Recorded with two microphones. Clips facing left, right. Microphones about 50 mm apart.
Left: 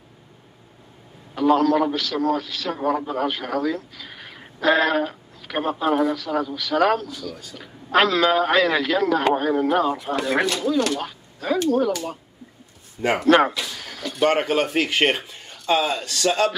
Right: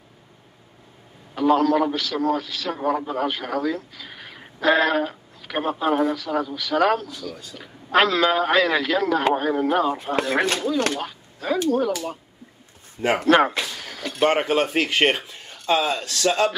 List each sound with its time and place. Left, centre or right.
1.3 s a man's voice: centre
11.0 s a man's voice: centre
13.5 s speech: right
13.7 s a sound: centre
14.2 s a man's voice: centre